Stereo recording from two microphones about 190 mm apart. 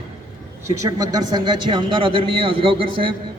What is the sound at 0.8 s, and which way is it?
A man's voice, 20° right (ahead or behind).